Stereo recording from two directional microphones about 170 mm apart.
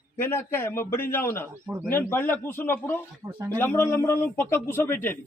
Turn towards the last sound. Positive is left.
turn(degrees=15)  # may be behind; listen again after turning